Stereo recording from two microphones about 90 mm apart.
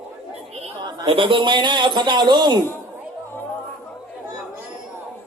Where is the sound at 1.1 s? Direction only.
70° right (ahead or behind); by 2.6 s 50° right (ahead or behind).